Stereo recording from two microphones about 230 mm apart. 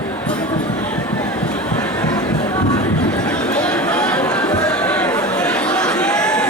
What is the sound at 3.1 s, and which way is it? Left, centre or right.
Chatter, centre.